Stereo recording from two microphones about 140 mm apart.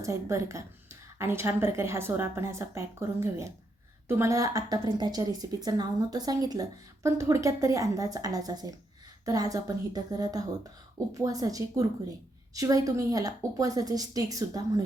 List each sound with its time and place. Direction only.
0.0 s a woman's voice: 20° right (ahead or behind)